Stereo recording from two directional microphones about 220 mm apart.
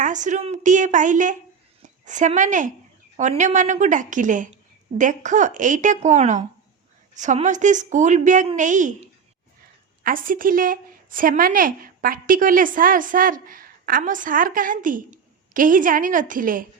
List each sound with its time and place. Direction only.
0.0 s a woman's voice: 35° right (ahead or behind)
10.0 s a woman's voice: 40° right (ahead or behind)